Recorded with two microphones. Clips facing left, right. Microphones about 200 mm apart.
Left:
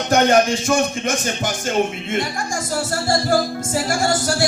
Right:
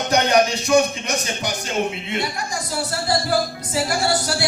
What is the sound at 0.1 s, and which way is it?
Speech, 50° left (ahead or behind).